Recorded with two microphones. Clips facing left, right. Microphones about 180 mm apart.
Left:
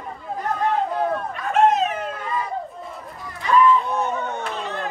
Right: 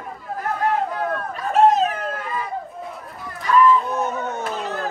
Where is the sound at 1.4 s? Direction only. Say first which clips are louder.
Right 2 dB; 35° right (ahead or behind).